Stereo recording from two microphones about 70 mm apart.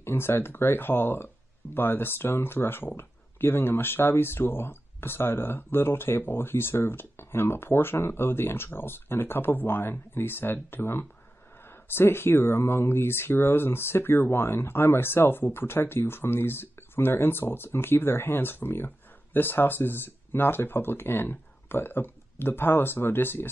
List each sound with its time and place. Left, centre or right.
0.0 s speech: left